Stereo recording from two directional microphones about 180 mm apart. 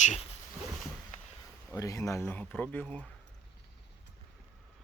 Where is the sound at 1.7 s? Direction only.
20° left (ahead or behind).